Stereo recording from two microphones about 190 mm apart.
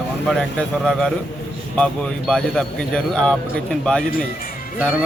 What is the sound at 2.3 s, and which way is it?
Speech, 5° left (ahead or behind).